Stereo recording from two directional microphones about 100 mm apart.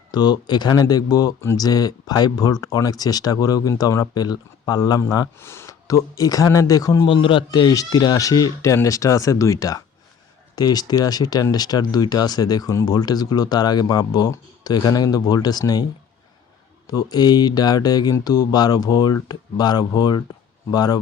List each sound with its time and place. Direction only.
0.1 s speech: 45° left (ahead or behind)
7.1 s speech: 60° left (ahead or behind); by 21.0 s 40° left (ahead or behind)